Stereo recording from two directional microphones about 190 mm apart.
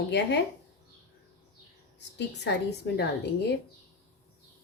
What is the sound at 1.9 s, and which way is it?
A woman's voice, 65° left (ahead or behind).